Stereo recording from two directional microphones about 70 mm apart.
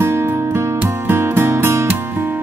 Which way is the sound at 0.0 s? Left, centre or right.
Right.